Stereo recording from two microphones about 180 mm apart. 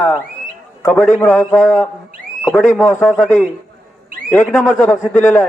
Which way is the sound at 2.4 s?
5° left (ahead or behind).